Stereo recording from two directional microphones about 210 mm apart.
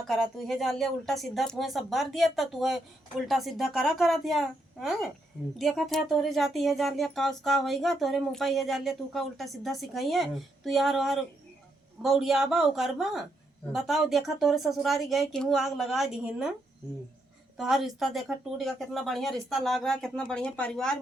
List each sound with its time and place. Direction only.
0.1 s speech: centre (ahead or behind)
17.6 s speech: centre (ahead or behind)